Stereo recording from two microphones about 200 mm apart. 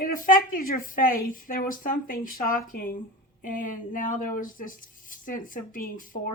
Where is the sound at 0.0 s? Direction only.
45° left (ahead or behind).